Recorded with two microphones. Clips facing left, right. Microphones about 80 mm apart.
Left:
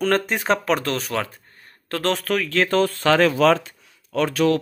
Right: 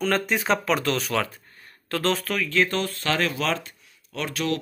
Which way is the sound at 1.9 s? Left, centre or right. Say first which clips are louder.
Left 2 dB; left.